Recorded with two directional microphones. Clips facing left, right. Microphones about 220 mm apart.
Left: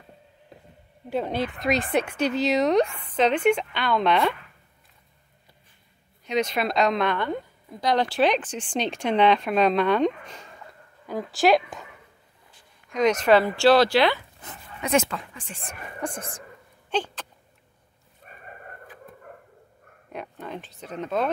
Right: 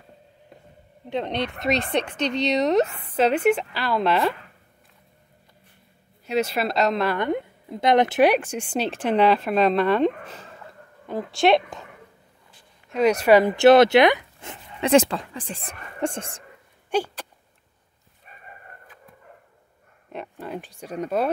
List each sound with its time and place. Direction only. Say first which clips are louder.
1.1 s a woman's voice: even; 5° left (ahead or behind)
6.2 s a woman's voice: right 1 dB; 5° right (ahead or behind)
7.2 s a woman's voice: right 4 dB; 20° right (ahead or behind); by 11.9 s centre (ahead or behind)
12.9 s speech: right 2 dB; 10° right (ahead or behind); by 16.4 s 25° right (ahead or behind)
16.9 s speech: right 3 dB; 10° right (ahead or behind)
18.3 s chicken: left 2 dB; 50° left (ahead or behind)
20.1 s speech: right 2 dB; centre (ahead or behind)